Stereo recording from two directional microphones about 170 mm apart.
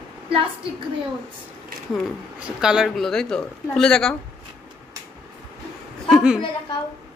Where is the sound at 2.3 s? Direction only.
5° right (ahead or behind).